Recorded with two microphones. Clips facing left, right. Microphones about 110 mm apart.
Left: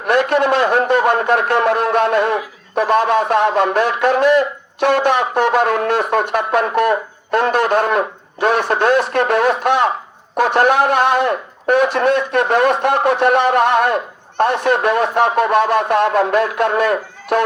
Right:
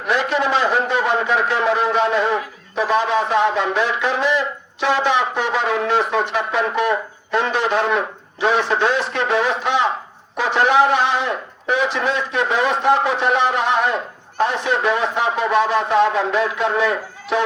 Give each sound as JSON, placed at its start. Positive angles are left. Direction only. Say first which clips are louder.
{"t": 0.0, "sound": "a man's voice", "louder": "left 5 dB", "side_deg": 55}